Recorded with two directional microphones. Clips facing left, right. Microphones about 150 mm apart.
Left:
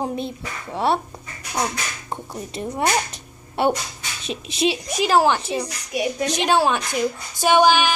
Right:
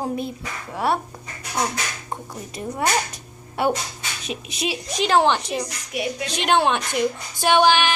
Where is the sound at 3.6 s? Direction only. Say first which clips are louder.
Left 2 dB; 25° left (ahead or behind).